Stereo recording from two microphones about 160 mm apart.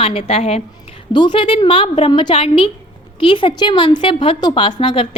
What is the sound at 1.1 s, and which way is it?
A woman's voice, 30° left (ahead or behind).